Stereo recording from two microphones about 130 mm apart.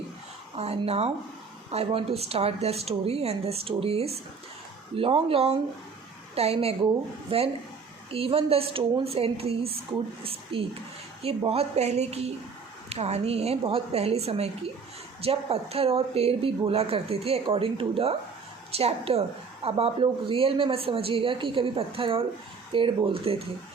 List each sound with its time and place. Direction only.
0.5 s a woman's voice: 50° right (ahead or behind)